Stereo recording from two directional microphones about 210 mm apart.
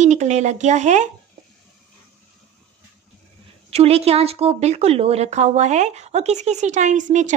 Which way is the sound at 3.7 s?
30° right (ahead or behind).